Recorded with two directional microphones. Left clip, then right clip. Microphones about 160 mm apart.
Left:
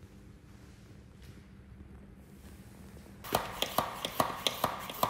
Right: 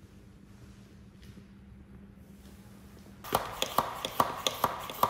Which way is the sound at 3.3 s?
Centre (ahead or behind).